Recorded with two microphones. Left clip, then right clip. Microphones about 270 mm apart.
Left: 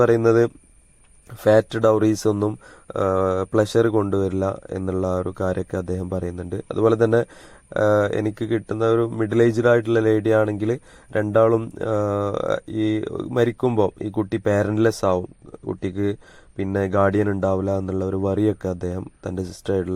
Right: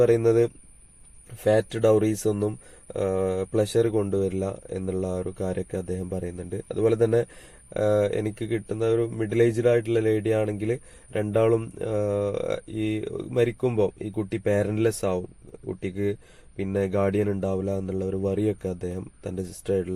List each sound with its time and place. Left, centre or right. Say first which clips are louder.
0.0 s speech: left 3 dB; centre
16.6 s speech: left 5 dB; left